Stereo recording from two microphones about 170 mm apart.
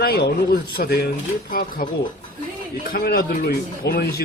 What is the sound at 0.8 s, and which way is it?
Speech, 65° left (ahead or behind).